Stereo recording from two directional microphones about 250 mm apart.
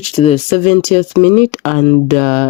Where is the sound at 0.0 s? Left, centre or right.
Left.